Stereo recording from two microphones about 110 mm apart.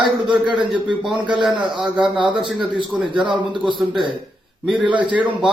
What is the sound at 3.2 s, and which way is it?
Speech, 45° right (ahead or behind).